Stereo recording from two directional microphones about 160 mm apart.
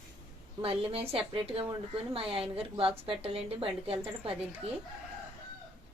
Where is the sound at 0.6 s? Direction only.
35° right (ahead or behind).